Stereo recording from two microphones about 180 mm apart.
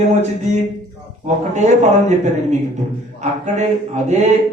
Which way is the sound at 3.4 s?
40° right (ahead or behind).